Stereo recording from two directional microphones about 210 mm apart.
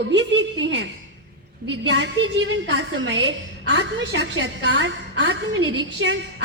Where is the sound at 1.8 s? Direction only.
55° right (ahead or behind).